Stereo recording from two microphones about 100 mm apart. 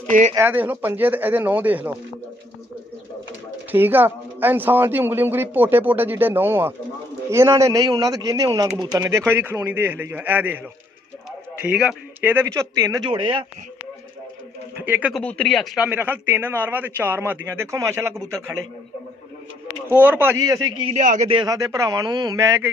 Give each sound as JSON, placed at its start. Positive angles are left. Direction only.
{"t": 0.4, "sound": "speech", "side_deg": -20}
{"t": 3.7, "sound": "speech", "side_deg": -20}
{"t": 9.0, "sound": "speech", "side_deg": -30}
{"t": 11.6, "sound": "speech", "side_deg": -10}
{"t": 12.2, "sound": "speech", "side_deg": -20}
{"t": 13.0, "sound": "a man's voice", "side_deg": -55}
{"t": 14.8, "sound": "speech", "side_deg": -15}
{"t": 15.2, "sound": "speech", "side_deg": 10}
{"t": 15.8, "sound": "speech", "side_deg": -20}
{"t": 19.9, "sound": "speech", "side_deg": -20}
{"t": 20.8, "sound": "a man's voice", "side_deg": -65}
{"t": 21.5, "sound": "speech", "side_deg": -35}
{"t": 22.4, "sound": "speech", "side_deg": -30}